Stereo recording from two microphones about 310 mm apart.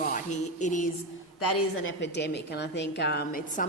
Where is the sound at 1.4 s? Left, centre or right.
Left.